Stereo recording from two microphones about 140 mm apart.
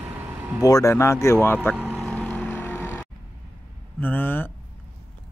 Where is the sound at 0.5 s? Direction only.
25° left (ahead or behind).